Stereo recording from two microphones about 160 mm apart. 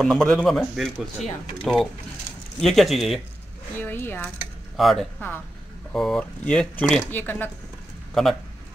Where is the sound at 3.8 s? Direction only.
15° left (ahead or behind).